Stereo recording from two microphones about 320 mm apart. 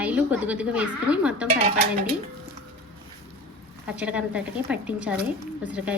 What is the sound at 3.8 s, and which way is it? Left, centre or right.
A woman's voice, centre.